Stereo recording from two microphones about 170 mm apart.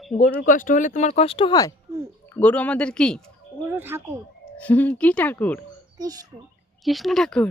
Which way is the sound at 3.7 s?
15° right (ahead or behind).